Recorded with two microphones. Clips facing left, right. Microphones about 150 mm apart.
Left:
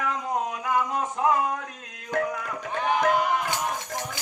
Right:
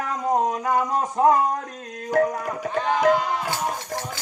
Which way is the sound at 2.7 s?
15° left (ahead or behind).